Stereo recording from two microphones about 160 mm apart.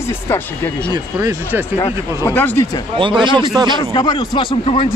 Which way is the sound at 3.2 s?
30° right (ahead or behind).